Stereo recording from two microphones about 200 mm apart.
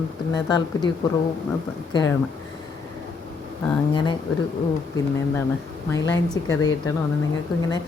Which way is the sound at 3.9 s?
20° left (ahead or behind).